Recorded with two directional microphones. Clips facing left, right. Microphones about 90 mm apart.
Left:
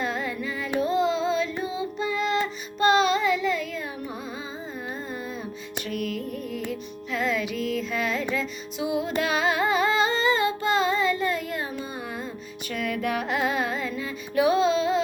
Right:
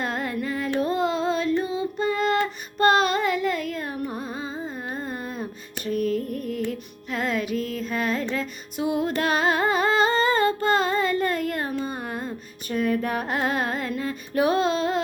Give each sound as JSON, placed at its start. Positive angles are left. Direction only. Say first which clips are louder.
{"t": 0.0, "sound": "carnatic music", "louder": "right 1 dB", "side_deg": -50}
{"t": 0.8, "sound": "music", "louder": "left 2 dB", "side_deg": -50}
{"t": 2.7, "sound": "carnatic music", "louder": "right 1 dB", "side_deg": -50}
{"t": 4.9, "sound": "music", "louder": "right 2 dB", "side_deg": -50}
{"t": 6.3, "sound": "music", "louder": "right 3 dB", "side_deg": -45}
{"t": 9.2, "sound": "carnatic music", "louder": "right 3 dB", "side_deg": -40}